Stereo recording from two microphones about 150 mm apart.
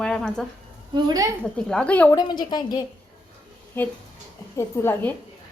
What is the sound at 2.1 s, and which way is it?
Speech, 30° left (ahead or behind).